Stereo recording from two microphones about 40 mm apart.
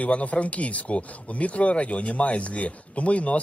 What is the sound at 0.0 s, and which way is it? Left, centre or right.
Speech, left.